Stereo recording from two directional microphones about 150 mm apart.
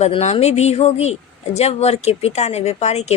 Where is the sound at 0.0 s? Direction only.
45° left (ahead or behind).